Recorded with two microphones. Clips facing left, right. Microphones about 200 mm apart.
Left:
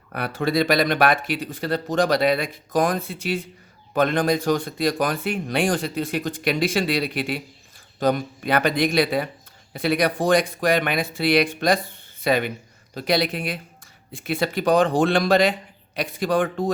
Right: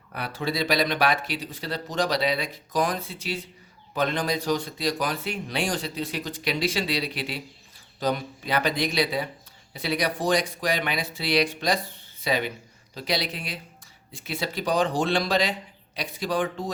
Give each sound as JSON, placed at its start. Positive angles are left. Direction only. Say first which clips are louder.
{"t": 0.1, "sound": "speech", "louder": "left 6 dB", "side_deg": 55}